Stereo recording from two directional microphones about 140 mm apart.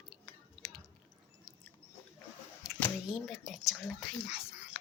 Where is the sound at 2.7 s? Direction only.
Centre (ahead or behind).